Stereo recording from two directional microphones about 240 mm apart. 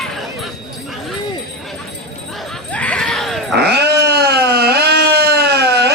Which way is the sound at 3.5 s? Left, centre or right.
Right.